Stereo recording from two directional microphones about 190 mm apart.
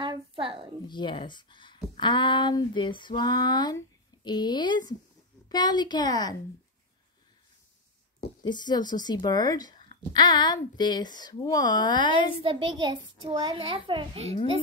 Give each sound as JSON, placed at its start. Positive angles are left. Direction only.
{"t": 0.0, "sound": "a sound", "side_deg": -25}
{"t": 0.8, "sound": "speech", "side_deg": 25}
{"t": 8.4, "sound": "speech", "side_deg": 20}
{"t": 12.7, "sound": "a child's voice", "side_deg": -25}